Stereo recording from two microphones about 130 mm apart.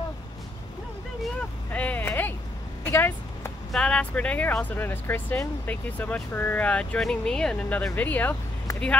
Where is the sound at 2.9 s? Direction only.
15° left (ahead or behind).